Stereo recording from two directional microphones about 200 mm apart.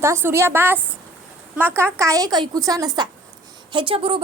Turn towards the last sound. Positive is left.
turn(degrees=-25)  # may be behind; listen again after turning